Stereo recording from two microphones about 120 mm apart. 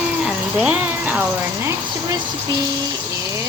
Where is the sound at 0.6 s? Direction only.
10° right (ahead or behind).